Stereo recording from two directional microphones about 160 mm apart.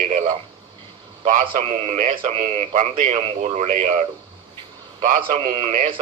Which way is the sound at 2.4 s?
40° right (ahead or behind).